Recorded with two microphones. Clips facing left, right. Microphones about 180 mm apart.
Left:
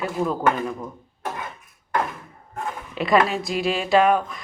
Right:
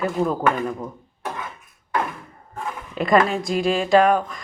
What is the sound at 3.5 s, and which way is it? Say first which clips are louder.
Speech: right 3 dB; 45° right (ahead or behind).